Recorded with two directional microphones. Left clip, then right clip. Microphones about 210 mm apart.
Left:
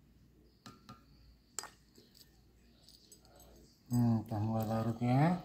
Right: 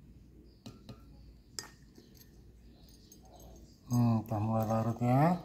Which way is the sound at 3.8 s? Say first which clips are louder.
Right 2 dB; 10° right (ahead or behind).